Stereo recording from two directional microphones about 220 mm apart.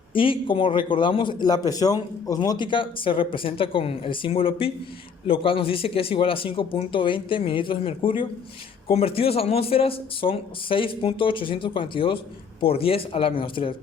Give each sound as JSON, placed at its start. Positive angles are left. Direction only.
{"t": 0.1, "sound": "speech", "side_deg": 25}